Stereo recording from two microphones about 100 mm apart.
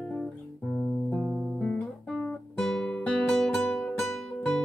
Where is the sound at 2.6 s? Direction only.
5° left (ahead or behind).